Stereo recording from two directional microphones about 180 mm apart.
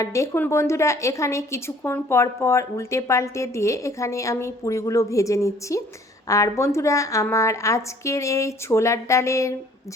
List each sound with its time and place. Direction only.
0.0 s a woman's voice: 15° left (ahead or behind)